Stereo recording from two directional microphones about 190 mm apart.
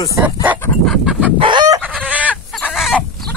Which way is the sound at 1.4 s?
25° right (ahead or behind).